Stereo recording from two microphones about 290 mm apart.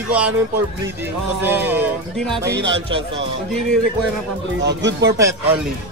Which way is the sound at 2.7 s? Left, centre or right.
Centre.